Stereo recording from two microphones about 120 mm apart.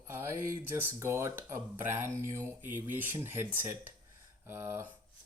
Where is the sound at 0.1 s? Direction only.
20° right (ahead or behind).